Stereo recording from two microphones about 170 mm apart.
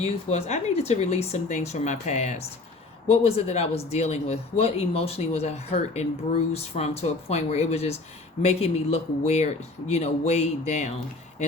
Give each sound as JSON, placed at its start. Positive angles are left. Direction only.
{"t": 0.0, "sound": "speech", "side_deg": 40}